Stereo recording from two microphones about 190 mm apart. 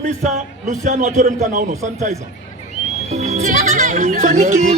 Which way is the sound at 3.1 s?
35° right (ahead or behind).